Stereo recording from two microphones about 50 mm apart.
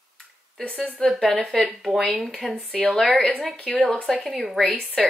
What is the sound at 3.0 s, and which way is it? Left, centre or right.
Speech, left.